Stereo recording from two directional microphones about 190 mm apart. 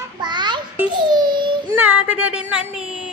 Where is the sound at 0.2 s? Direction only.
25° right (ahead or behind).